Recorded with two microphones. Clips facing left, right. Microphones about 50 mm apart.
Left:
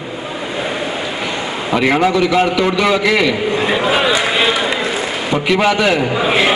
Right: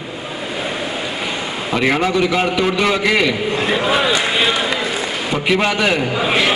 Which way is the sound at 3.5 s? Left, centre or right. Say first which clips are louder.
Left 2 dB; centre.